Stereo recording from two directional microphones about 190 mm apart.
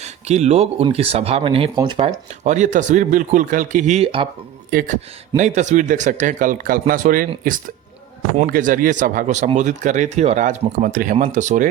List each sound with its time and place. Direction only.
0.0 s speech: 35° right (ahead or behind)
2.0 s speech: 40° right (ahead or behind)
4.7 s speech: 50° right (ahead or behind)
8.4 s speech: 45° right (ahead or behind)